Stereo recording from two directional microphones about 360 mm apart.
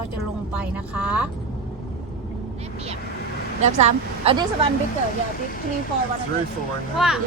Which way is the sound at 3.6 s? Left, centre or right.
Centre.